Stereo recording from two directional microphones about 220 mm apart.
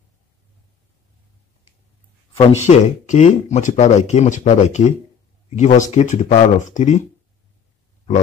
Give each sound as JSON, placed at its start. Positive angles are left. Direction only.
{"t": 2.3, "sound": "speech", "side_deg": 30}